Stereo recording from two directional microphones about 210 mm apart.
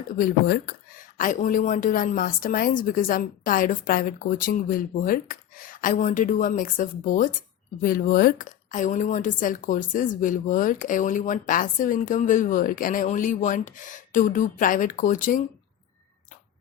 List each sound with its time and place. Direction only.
0.1 s a woman's voice: 45° left (ahead or behind)